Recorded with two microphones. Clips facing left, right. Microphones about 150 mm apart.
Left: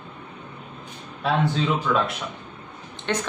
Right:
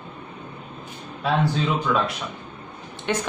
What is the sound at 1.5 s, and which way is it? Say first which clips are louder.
A man's voice: even; centre (ahead or behind).